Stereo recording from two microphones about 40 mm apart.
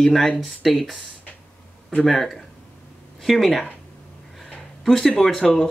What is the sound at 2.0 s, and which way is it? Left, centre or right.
Speech, centre.